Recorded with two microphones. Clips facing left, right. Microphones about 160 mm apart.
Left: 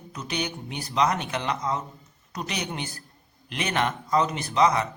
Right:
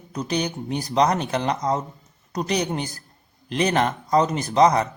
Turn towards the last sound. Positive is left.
turn(degrees=-40)  # may be behind; listen again after turning